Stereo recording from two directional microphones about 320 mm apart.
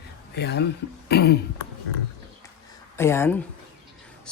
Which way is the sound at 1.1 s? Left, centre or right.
Left.